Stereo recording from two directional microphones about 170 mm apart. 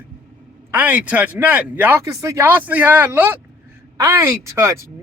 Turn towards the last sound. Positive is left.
turn(degrees=-15)  # may be behind; listen again after turning